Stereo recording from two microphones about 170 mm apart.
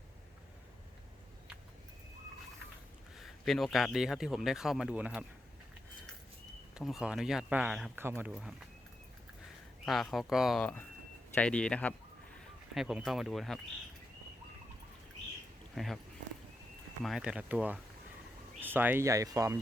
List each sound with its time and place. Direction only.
3.2 s a man's voice: centre (ahead or behind)
6.7 s a man's voice: 5° right (ahead or behind)
8.3 s a man's voice: centre (ahead or behind)
9.8 s a man's voice: centre (ahead or behind)
15.7 s speech: centre (ahead or behind)
17.0 s speech: centre (ahead or behind); by 19.5 s 20° right (ahead or behind)